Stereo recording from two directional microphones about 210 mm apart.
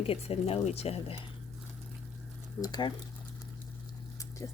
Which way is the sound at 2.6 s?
20° left (ahead or behind).